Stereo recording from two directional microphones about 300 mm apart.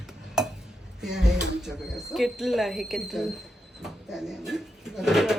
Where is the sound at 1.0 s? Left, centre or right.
Centre.